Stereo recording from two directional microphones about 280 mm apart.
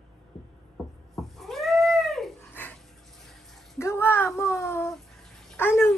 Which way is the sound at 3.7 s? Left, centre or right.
Centre.